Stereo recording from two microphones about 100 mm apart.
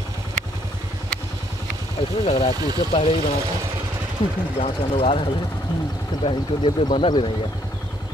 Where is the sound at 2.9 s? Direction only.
65° left (ahead or behind).